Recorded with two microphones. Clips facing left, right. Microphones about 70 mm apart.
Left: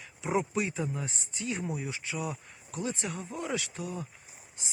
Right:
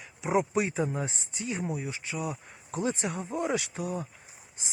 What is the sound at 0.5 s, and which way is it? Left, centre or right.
Speech, right.